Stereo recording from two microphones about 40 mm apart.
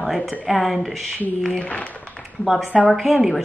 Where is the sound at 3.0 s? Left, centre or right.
Centre.